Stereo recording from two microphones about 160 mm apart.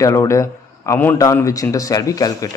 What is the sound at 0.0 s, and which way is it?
Speech, 20° left (ahead or behind).